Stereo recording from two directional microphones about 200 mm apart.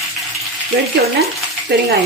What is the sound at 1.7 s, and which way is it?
Speech, 55° right (ahead or behind).